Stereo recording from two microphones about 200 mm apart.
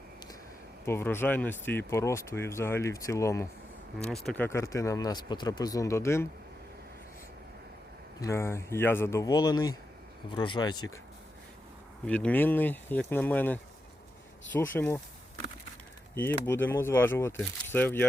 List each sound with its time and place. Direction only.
0.9 s speech: 10° left (ahead or behind)
3.9 s speech: centre (ahead or behind)
8.2 s speech: 15° left (ahead or behind)
12.0 s speech: 5° left (ahead or behind)
16.1 s speech: 10° left (ahead or behind)